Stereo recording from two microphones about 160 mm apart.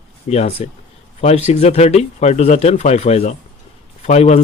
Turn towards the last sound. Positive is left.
turn(degrees=40)  # may be behind; listen again after turning